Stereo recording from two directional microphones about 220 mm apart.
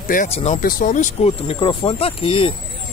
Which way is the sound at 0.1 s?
30° left (ahead or behind).